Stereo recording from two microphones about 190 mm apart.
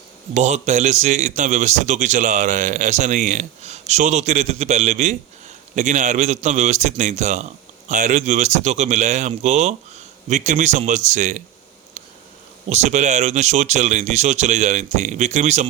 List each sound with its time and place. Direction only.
0.3 s a man's voice: 35° right (ahead or behind)
12.6 s a man's voice: 35° right (ahead or behind)